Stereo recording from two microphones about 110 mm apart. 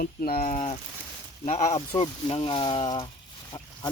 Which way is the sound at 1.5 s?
90° left.